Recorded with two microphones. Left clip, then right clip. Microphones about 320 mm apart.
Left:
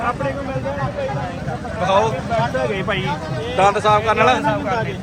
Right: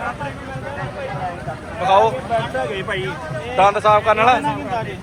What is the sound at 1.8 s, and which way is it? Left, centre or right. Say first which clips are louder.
Speech: right 3 dB; centre.